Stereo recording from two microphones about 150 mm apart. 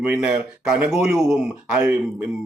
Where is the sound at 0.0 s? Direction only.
10° right (ahead or behind).